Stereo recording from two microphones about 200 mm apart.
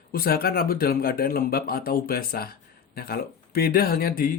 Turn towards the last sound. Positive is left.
turn(degrees=50)  # may be behind; listen again after turning